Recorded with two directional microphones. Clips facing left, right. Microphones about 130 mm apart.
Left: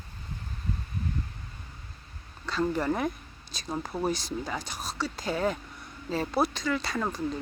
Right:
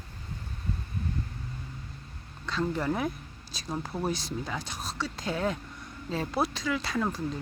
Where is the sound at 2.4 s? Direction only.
Centre (ahead or behind).